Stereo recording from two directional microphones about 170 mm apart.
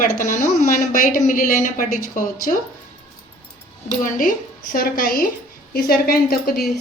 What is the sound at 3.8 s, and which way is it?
A woman's voice, 55° left (ahead or behind).